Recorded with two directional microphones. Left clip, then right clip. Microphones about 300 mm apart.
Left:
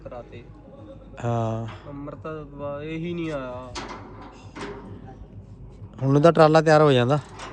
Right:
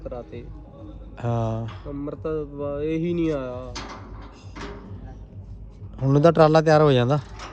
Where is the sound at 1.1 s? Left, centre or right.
Centre.